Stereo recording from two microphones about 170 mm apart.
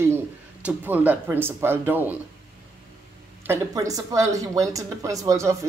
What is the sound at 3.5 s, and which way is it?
Speech, 20° right (ahead or behind).